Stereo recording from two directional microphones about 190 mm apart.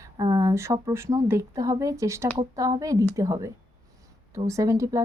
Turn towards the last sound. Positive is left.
turn(degrees=-15)  # may be behind; listen again after turning